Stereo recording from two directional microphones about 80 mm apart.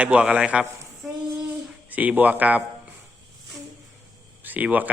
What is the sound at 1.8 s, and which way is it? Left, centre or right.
Speech, centre.